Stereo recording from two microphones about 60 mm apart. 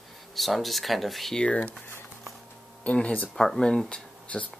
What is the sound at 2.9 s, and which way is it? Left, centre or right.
Speech, left.